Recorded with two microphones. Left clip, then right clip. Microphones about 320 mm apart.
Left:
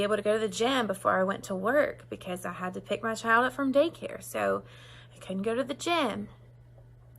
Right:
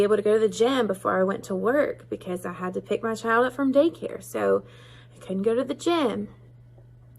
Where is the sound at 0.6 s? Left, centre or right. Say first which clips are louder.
Right 3 dB; centre.